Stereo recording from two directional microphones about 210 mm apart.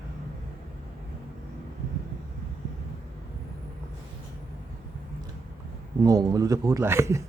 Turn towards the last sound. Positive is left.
turn(degrees=-15)  # may be behind; listen again after turning